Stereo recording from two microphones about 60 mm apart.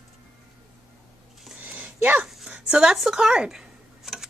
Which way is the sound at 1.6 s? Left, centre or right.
Right.